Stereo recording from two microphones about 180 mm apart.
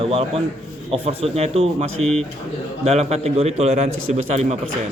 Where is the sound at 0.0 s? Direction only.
35° right (ahead or behind).